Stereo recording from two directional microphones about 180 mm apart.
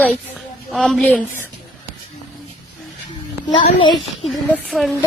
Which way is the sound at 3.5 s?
30° left (ahead or behind).